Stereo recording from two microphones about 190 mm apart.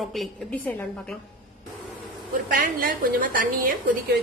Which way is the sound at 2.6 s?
45° right (ahead or behind).